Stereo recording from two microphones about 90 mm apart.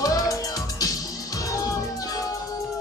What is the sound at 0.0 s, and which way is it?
Music, 40° left (ahead or behind).